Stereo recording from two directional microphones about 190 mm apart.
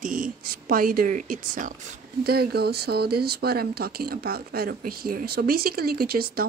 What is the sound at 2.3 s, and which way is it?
Speech, 55° right (ahead or behind).